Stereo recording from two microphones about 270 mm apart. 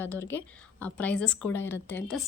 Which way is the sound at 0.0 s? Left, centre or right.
Centre.